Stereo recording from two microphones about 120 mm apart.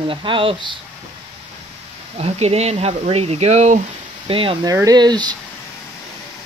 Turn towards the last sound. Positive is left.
turn(degrees=-35)  # may be behind; listen again after turning